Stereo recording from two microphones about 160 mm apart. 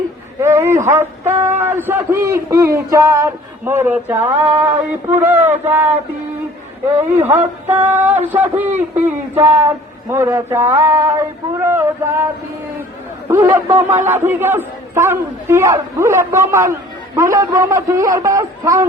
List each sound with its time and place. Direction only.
0.3 s a sound: 15° right (ahead or behind)
1.6 s a man's voice: 15° right (ahead or behind)
7.2 s a man's voice: 15° right (ahead or behind)
13.3 s a man's voice: 15° right (ahead or behind)